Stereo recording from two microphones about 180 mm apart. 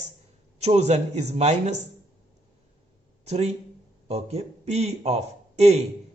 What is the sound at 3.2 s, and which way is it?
A man's voice, 35° right (ahead or behind).